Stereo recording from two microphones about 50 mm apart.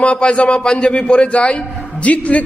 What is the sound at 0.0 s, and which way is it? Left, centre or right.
A man's voice, left.